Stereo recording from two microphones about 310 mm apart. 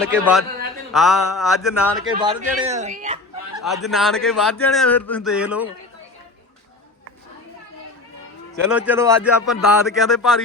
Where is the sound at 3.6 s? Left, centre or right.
Centre.